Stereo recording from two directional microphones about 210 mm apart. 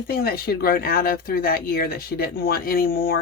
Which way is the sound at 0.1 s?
45° left (ahead or behind).